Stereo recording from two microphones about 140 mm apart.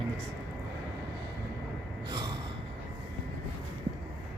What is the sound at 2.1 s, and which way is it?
Gasp, 30° right (ahead or behind).